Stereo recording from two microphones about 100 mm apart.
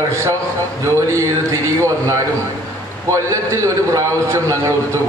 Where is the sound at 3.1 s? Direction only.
30° right (ahead or behind).